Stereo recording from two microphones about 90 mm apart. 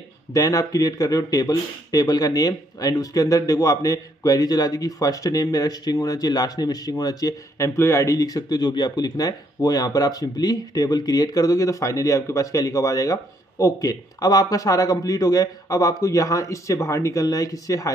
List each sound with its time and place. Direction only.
0.3 s speech: 40° left (ahead or behind)